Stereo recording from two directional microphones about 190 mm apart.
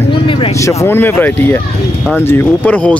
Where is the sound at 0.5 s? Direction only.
15° left (ahead or behind).